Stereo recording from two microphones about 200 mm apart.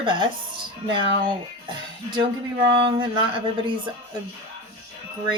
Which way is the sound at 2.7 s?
25° right (ahead or behind).